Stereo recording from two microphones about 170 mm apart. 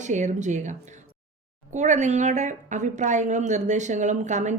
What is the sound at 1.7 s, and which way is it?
Speech, 45° right (ahead or behind).